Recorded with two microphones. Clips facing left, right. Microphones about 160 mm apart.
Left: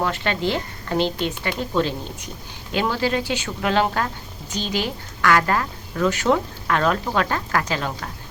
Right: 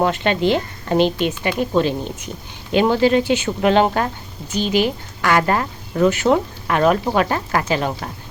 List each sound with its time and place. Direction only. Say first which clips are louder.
0.0 s a woman's voice: right 5 dB; 20° right (ahead or behind)